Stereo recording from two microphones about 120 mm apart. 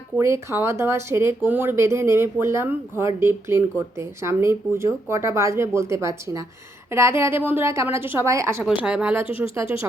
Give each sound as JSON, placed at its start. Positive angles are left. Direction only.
{"t": 0.2, "sound": "speech", "side_deg": -25}
{"t": 8.6, "sound": "speech", "side_deg": -10}
{"t": 9.4, "sound": "speech", "side_deg": -25}